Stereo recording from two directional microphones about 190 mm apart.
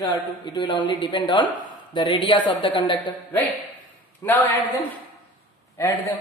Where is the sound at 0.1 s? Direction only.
20° left (ahead or behind).